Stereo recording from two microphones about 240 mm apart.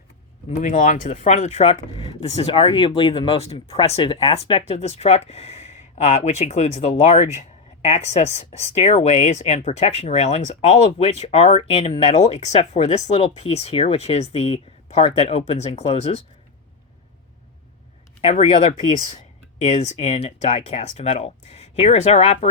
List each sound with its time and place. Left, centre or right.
0.6 s speech: left
18.2 s speech: left